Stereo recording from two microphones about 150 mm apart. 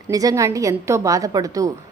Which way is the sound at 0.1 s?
25° right (ahead or behind).